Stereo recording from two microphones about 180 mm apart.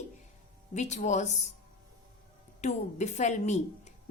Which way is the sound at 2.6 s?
40° left (ahead or behind).